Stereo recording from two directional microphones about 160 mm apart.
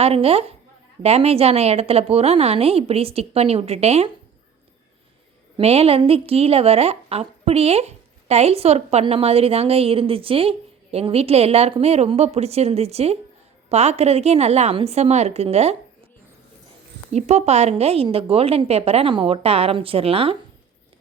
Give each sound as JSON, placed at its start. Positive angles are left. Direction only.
{"t": 0.0, "sound": "a woman's voice", "side_deg": -40}
{"t": 5.5, "sound": "a woman's voice", "side_deg": -40}
{"t": 17.1, "sound": "a woman's voice", "side_deg": -45}